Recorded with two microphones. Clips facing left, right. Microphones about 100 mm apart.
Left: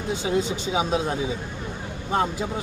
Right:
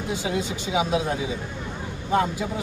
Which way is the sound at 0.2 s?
30° left (ahead or behind).